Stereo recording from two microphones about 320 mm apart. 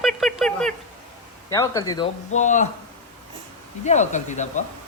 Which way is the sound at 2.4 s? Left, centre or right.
Left.